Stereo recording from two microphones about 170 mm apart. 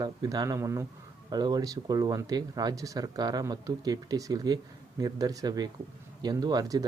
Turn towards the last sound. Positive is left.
turn(degrees=-20)  # may be behind; listen again after turning